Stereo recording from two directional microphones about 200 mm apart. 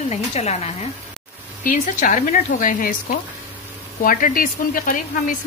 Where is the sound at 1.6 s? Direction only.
40° left (ahead or behind).